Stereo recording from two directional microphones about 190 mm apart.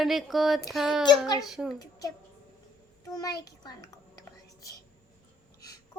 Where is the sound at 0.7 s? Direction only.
Centre (ahead or behind).